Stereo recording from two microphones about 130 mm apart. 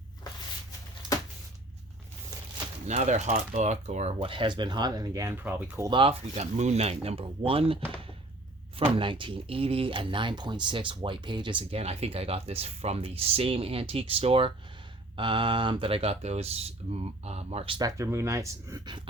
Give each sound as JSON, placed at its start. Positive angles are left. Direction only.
{"t": 2.8, "sound": "speech", "side_deg": -65}
{"t": 4.2, "sound": "speech", "side_deg": -40}
{"t": 5.3, "sound": "speech", "side_deg": -15}
{"t": 5.9, "sound": "speech", "side_deg": -40}
{"t": 6.3, "sound": "speech", "side_deg": -60}
{"t": 9.0, "sound": "speech", "side_deg": -40}
{"t": 11.8, "sound": "speech", "side_deg": -55}
{"t": 17.7, "sound": "speech", "side_deg": -25}